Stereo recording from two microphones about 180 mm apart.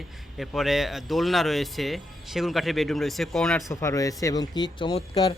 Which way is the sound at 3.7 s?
15° left (ahead or behind).